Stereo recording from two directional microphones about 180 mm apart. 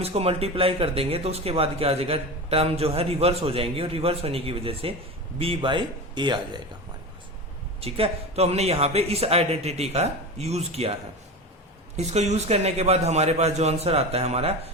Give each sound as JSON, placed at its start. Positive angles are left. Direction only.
{"t": 0.0, "sound": "speech", "side_deg": -35}
{"t": 7.8, "sound": "speech", "side_deg": -35}
{"t": 11.9, "sound": "speech", "side_deg": -40}